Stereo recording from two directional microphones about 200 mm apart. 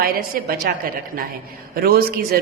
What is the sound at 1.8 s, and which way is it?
Speech, 50° right (ahead or behind).